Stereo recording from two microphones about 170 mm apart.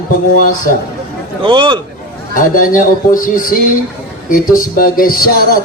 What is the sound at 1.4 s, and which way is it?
Speech, 30° right (ahead or behind).